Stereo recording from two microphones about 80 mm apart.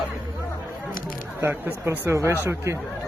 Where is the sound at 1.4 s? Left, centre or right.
Right.